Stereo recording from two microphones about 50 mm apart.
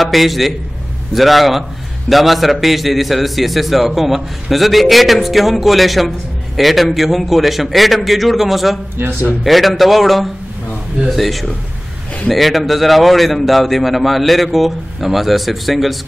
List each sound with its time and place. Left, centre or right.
0.0 s a man's voice: centre
8.9 s a man's voice: right
9.4 s a man's voice: centre